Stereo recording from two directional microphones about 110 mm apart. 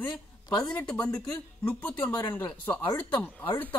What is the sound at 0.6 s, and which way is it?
A woman's voice, 5° left (ahead or behind).